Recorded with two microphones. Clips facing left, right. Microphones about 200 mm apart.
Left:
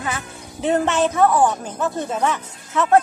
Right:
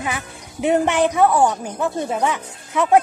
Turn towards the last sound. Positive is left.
turn(degrees=-15)  # may be behind; listen again after turning